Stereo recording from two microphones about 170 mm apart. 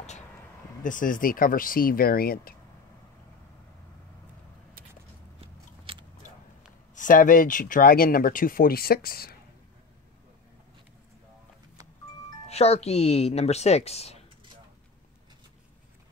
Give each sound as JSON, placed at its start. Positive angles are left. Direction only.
{"t": 0.8, "sound": "speech", "side_deg": 50}
{"t": 5.4, "sound": "biting", "side_deg": -30}
{"t": 7.0, "sound": "speech", "side_deg": 50}
{"t": 12.4, "sound": "speech", "side_deg": 40}